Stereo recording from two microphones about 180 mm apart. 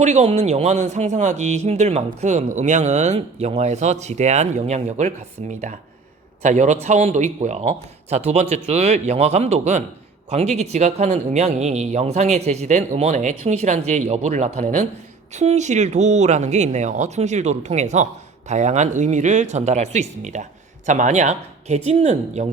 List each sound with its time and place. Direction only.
0.0 s speech: 35° right (ahead or behind)